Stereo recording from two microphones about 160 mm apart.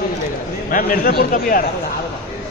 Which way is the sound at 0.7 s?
60° left (ahead or behind).